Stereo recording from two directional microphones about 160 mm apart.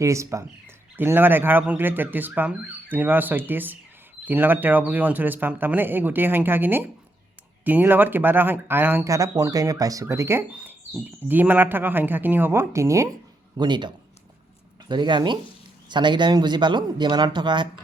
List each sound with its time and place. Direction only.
0.0 s speech: 20° right (ahead or behind)
13.6 s speech: 30° right (ahead or behind)